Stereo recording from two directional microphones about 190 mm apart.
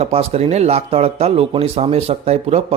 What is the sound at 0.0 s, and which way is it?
Speech, 30° right (ahead or behind).